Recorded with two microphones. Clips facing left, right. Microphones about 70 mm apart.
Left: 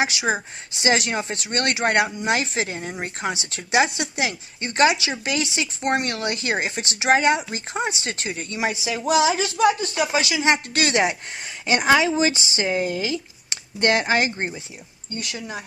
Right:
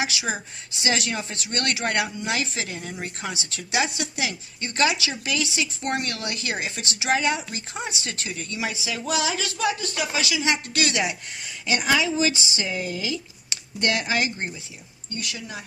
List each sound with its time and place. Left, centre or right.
0.0 s speech: left